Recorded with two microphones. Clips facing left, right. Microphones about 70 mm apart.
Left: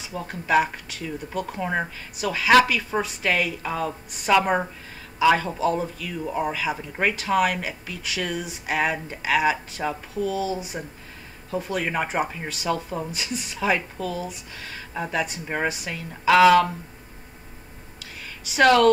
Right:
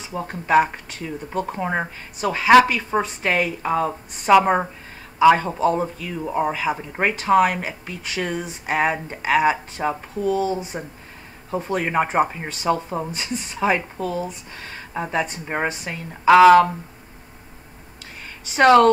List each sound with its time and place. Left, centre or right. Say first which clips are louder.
0.1 s speech: right 4 dB; right
5.7 s speech: right 3 dB; right
9.4 s speech: right 3 dB; right
11.5 s speech: right 4 dB; right
13.1 s speech: right 2 dB; right
13.6 s speech: right 3 dB; right
15.0 s speech: right 3 dB; right
18.6 s speech: right 4 dB; right